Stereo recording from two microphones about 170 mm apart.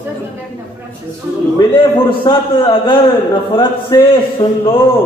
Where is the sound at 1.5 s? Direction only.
30° left (ahead or behind).